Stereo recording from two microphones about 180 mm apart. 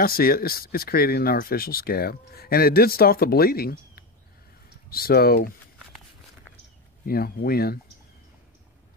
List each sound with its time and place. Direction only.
0.0 s speech: 55° left (ahead or behind)
7.1 s speech: 55° left (ahead or behind)